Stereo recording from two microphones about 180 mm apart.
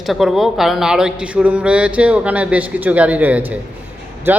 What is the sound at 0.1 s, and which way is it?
Speech, centre (ahead or behind).